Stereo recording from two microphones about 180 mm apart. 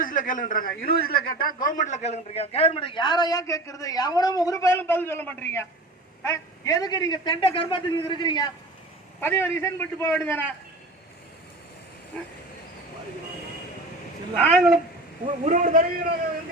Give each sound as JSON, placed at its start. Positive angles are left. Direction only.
{"t": 0.0, "sound": "a man's voice", "side_deg": 45}
{"t": 9.2, "sound": "a man's voice", "side_deg": 15}
{"t": 12.1, "sound": "speech", "side_deg": 5}
{"t": 14.4, "sound": "speech", "side_deg": 0}
{"t": 15.4, "sound": "a man's voice", "side_deg": -50}